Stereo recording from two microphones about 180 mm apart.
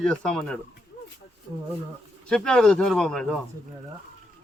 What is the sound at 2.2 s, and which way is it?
A man's voice, 5° left (ahead or behind).